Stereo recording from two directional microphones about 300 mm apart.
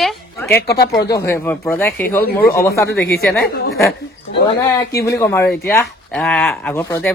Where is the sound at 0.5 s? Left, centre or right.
Left.